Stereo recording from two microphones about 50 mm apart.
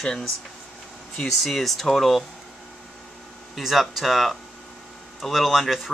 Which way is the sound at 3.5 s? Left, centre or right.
Centre.